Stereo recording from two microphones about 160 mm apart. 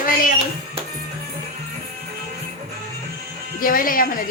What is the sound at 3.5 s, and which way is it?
Speech, 60° left (ahead or behind).